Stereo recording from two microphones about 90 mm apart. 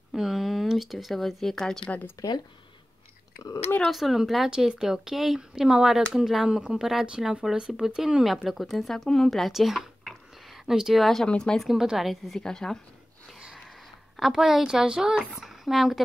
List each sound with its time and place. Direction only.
0.1 s speech: 5° right (ahead or behind)
1.9 s speech: 20° left (ahead or behind)
3.9 s speech: centre (ahead or behind)
14.1 s speech: 5° right (ahead or behind)